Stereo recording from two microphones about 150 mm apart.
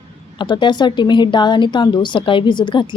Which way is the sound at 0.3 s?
30° left (ahead or behind).